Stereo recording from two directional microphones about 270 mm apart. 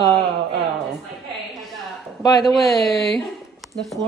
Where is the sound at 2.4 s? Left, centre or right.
Centre.